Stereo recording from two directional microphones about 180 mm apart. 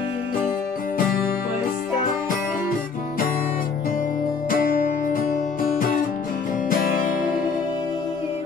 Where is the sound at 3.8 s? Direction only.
50° left (ahead or behind).